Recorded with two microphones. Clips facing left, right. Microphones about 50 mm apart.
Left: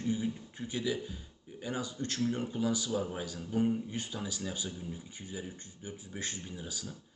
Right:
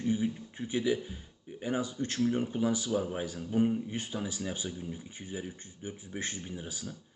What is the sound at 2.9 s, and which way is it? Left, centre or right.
Speech, centre.